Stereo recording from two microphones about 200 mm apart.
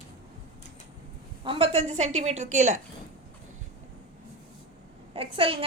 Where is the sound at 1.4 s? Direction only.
30° right (ahead or behind).